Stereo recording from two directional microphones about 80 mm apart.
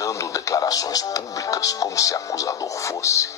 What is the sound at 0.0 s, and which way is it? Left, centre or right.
Speech, left.